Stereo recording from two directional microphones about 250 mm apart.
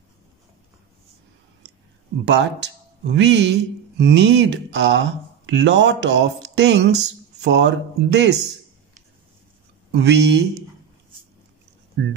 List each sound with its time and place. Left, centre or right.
2.2 s speech: right
9.9 s speech: right
12.0 s speech: right